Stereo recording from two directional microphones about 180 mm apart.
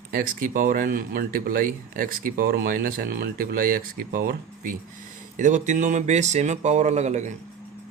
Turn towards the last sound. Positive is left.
turn(degrees=-40)  # may be behind; listen again after turning